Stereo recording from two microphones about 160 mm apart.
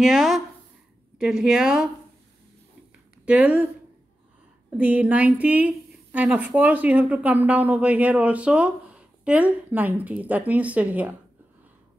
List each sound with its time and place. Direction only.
0.0 s a woman's voice: centre (ahead or behind)
3.3 s a woman's voice: 10° right (ahead or behind)
4.7 s a woman's voice: 10° right (ahead or behind)